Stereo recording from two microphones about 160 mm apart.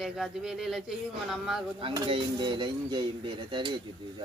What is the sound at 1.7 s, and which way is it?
Speech, 30° right (ahead or behind).